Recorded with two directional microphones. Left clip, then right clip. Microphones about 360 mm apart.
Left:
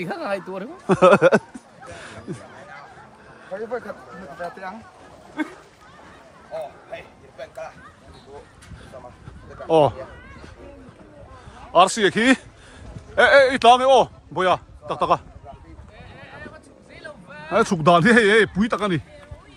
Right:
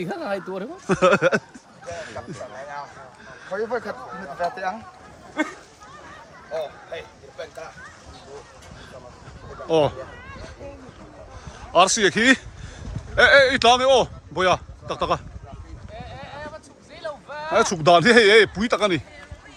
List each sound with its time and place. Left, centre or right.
0.0 s speech: centre
0.9 s chuckle: centre
3.5 s speech: right
7.4 s speech: centre
9.6 s chuckle: centre
11.7 s a man's voice: centre
16.0 s a sound: centre
17.5 s speech: centre